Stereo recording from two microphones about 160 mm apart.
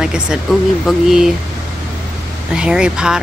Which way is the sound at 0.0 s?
5° right (ahead or behind).